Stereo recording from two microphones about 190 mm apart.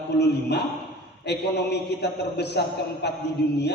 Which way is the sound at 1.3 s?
60° left (ahead or behind).